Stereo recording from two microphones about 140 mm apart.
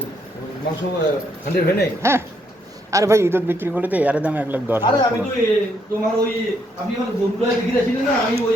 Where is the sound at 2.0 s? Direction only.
20° right (ahead or behind).